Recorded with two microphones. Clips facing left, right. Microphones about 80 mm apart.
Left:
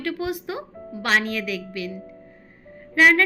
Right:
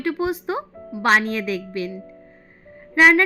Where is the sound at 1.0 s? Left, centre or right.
Right.